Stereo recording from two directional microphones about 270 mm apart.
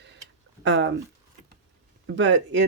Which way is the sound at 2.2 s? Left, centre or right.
Right.